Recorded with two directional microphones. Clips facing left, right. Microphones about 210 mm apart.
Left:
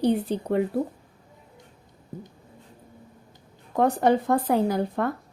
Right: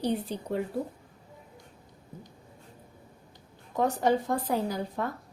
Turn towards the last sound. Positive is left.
turn(degrees=60)  # may be behind; listen again after turning